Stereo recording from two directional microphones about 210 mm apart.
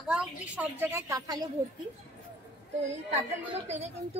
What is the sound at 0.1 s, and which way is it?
A woman's voice, 5° right (ahead or behind).